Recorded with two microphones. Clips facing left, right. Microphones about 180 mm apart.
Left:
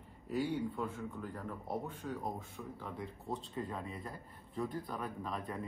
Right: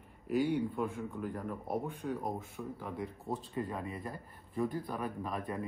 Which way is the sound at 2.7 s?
5° right (ahead or behind).